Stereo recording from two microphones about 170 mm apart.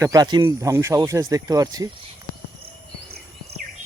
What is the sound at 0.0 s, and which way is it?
Speech, 20° right (ahead or behind).